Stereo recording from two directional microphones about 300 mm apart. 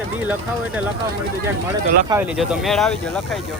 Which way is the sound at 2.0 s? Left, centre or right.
Centre.